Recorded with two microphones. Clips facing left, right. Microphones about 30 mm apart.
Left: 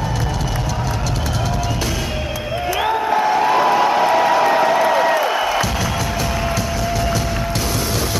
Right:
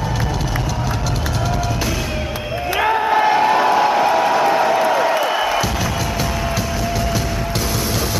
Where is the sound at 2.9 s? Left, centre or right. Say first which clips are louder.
Right 2 dB; centre.